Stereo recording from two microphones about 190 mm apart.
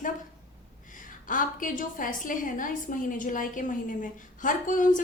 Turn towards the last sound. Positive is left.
turn(degrees=45)  # may be behind; listen again after turning